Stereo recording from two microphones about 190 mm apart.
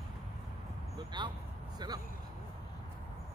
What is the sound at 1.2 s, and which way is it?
Vehicle, 25° right (ahead or behind).